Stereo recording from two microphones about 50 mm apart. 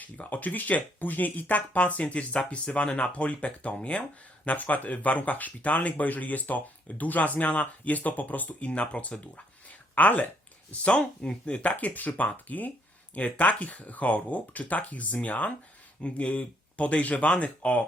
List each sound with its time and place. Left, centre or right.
0.0 s speech: left